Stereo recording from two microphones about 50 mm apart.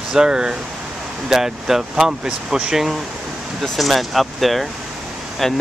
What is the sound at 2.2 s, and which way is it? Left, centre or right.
Speech, right.